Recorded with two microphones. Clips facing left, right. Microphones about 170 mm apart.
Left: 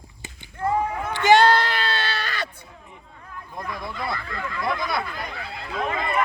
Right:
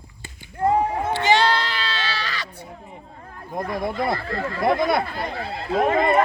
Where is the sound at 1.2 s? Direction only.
50° left (ahead or behind).